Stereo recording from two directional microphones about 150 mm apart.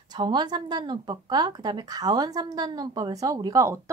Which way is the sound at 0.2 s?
30° right (ahead or behind).